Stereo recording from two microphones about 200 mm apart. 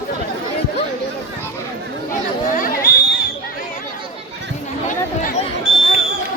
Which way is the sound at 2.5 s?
45° left (ahead or behind).